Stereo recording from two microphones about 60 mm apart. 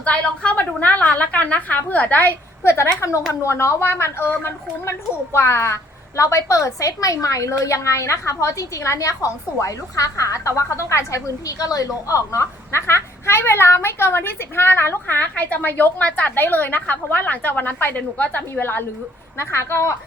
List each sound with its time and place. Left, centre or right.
0.0 s a woman's voice: left
2.6 s a woman's voice: left
19.4 s a woman's voice: left